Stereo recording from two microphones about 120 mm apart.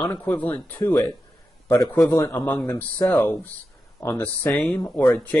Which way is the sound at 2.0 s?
25° left (ahead or behind).